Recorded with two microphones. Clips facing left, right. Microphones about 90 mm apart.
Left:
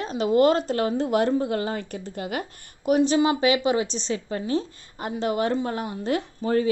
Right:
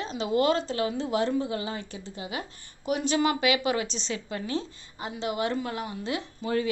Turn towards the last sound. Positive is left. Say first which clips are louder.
# left 5 dB
turn(degrees=45)  # may be behind; listen again after turning